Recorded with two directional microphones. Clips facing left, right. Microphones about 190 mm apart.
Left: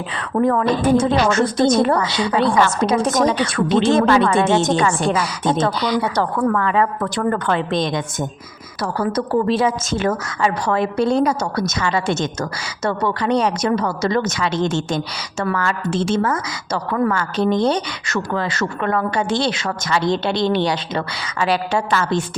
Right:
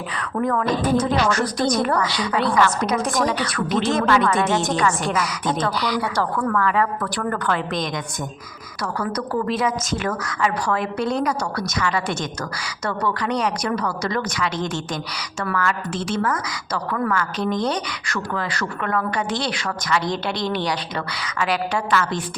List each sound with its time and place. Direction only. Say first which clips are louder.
0.2 s a woman's voice: left 5 dB; 30° left (ahead or behind)